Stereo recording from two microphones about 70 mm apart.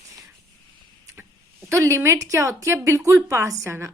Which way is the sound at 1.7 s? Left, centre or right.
Right.